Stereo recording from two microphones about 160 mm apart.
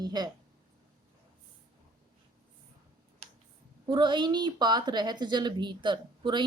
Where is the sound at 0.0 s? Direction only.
25° right (ahead or behind).